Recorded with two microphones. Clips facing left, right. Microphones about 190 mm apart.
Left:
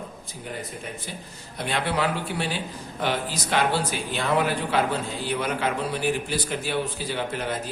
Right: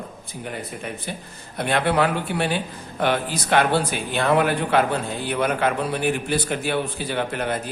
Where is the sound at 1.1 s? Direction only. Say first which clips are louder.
Right 5 dB; 60° right (ahead or behind).